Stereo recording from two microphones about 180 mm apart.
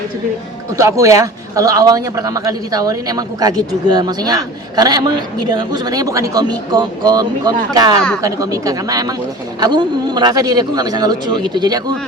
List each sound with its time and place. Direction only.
0.8 s speech: 15° right (ahead or behind)